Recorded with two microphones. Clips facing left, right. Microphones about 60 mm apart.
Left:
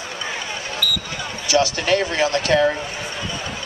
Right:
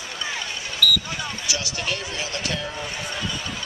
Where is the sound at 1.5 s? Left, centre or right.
Left.